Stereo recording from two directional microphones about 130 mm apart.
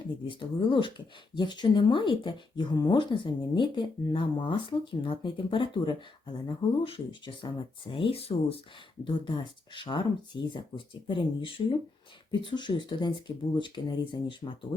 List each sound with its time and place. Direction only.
0.3 s speech: 40° left (ahead or behind)
9.0 s speech: 40° left (ahead or behind)